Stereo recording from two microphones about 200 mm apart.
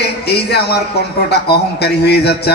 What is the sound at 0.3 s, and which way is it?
Speech, 55° left (ahead or behind).